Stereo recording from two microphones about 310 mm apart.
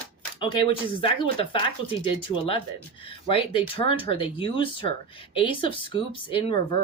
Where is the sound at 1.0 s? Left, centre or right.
Centre.